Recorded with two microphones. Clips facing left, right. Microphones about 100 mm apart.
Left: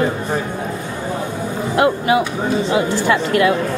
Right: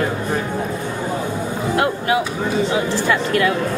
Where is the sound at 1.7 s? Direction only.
20° left (ahead or behind).